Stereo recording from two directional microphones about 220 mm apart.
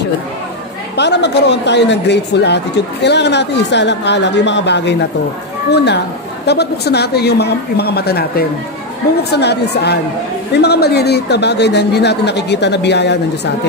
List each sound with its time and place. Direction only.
0.9 s speech: 50° left (ahead or behind)